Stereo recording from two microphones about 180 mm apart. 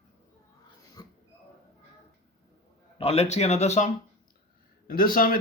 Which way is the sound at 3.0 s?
35° left (ahead or behind).